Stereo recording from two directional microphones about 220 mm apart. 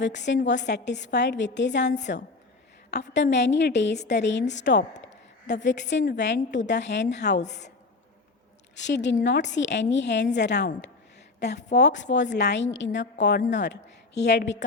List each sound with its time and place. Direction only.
0.0 s a woman's voice: 55° left (ahead or behind)
8.7 s a woman's voice: 55° left (ahead or behind)